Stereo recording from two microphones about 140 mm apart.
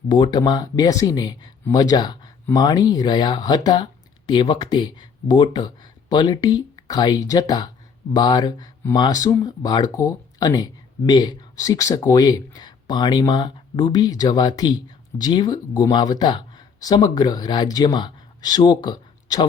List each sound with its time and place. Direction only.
0.1 s speech: 30° left (ahead or behind)